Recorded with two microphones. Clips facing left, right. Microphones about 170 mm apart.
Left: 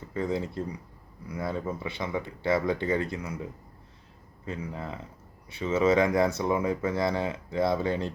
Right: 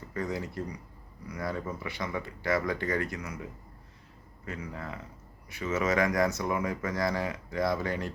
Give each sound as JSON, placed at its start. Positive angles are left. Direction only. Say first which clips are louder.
{"t": 0.1, "sound": "speech", "louder": "left 4 dB", "side_deg": 25}
{"t": 4.4, "sound": "speech", "louder": "left 3 dB", "side_deg": 25}